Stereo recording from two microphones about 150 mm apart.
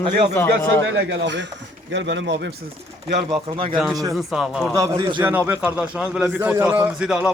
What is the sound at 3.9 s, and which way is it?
Speech, 25° right (ahead or behind).